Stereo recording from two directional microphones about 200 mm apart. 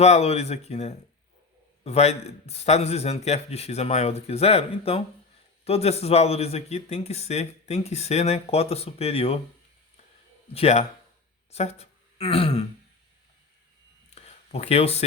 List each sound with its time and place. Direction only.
0.0 s speech: 35° left (ahead or behind)
10.5 s speech: 30° left (ahead or behind)
14.2 s a sound: 30° left (ahead or behind)